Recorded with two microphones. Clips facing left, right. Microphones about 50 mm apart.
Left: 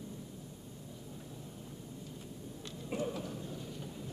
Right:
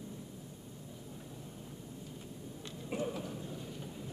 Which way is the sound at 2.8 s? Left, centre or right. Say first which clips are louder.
Even; centre.